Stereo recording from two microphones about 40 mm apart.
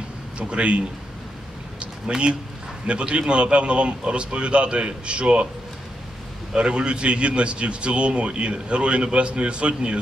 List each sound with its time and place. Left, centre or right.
0.4 s a man's voice: right
6.5 s a man's voice: right